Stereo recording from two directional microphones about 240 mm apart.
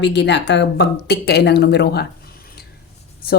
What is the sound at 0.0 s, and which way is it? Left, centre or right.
Speech, left.